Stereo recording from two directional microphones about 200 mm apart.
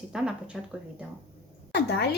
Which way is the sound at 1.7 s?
55° left (ahead or behind).